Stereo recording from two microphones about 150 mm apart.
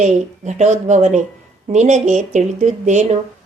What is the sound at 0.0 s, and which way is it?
Speech, 50° right (ahead or behind).